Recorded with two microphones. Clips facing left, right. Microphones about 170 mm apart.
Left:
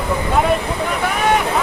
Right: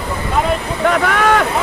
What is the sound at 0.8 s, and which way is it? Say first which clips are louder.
Speech: right 8 dB; 90° right.